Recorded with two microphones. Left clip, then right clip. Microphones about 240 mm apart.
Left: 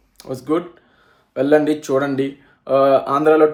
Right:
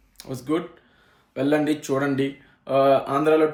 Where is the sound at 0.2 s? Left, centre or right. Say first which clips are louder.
Left 5 dB; centre.